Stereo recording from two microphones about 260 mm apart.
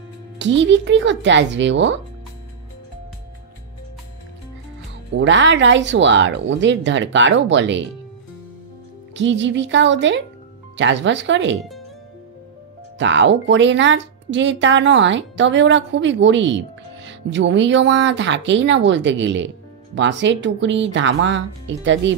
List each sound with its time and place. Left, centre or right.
0.4 s a woman's voice: right
5.1 s a woman's voice: right
9.1 s a woman's voice: right
13.0 s a woman's voice: right